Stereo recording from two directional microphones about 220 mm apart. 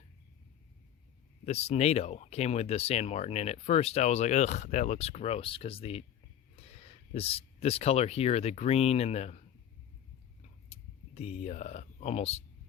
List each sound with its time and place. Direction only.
1.5 s speech: 30° left (ahead or behind)
10.7 s speech: 30° left (ahead or behind)